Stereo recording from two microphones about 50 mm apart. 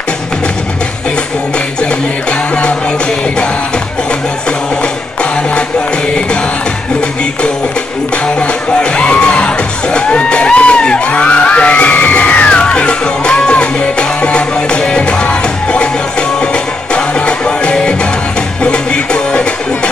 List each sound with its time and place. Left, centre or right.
8.4 s music: left
12.4 s music: centre